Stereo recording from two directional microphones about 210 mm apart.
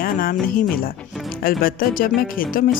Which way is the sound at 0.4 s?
45° left (ahead or behind).